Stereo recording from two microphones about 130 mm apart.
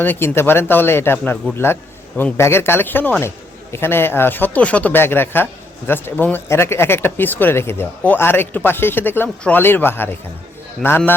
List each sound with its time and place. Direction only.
0.0 s speech: 15° left (ahead or behind)